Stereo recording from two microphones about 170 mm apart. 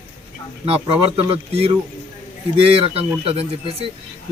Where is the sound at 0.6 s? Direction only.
35° right (ahead or behind).